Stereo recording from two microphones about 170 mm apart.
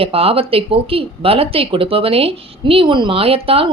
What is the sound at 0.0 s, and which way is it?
Speech, 35° right (ahead or behind).